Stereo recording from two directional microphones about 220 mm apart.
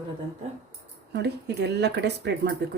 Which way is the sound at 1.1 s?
50° right (ahead or behind).